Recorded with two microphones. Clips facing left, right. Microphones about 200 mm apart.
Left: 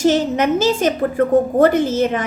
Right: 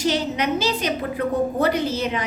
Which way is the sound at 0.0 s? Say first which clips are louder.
Left 7 dB; 50° left (ahead or behind).